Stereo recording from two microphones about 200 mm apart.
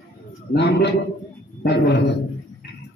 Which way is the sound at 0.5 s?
55° left (ahead or behind).